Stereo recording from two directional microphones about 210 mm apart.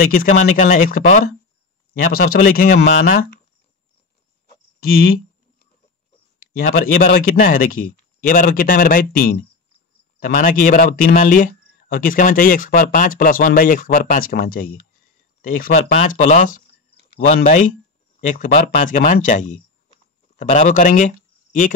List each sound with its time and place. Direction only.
0.2 s a man's voice: 40° left (ahead or behind)
4.7 s a sound: 45° left (ahead or behind)
7.0 s a man's voice: 45° left (ahead or behind)